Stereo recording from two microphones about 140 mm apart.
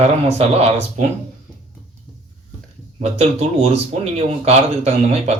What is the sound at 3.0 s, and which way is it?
Speech, 45° right (ahead or behind).